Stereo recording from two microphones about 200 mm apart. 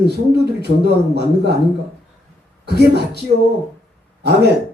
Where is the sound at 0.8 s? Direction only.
55° right (ahead or behind).